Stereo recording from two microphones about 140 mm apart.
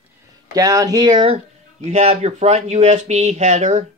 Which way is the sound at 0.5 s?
25° right (ahead or behind).